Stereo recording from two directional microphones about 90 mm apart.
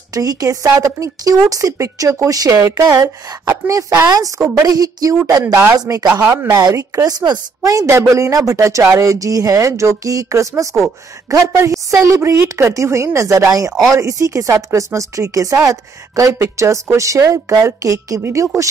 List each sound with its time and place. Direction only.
0.1 s speech: 40° right (ahead or behind)
3.4 s speech: 35° right (ahead or behind)
5.4 s speech: 20° right (ahead or behind)
5.8 s speech: 40° right (ahead or behind)